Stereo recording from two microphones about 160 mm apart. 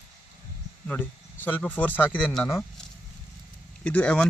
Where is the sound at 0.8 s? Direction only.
10° left (ahead or behind).